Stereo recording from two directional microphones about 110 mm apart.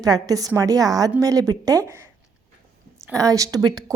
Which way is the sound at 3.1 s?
30° right (ahead or behind).